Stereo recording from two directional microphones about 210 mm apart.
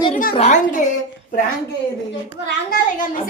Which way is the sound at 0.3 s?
35° left (ahead or behind).